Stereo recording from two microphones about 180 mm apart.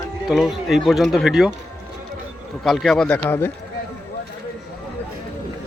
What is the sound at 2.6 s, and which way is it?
Speech, centre (ahead or behind).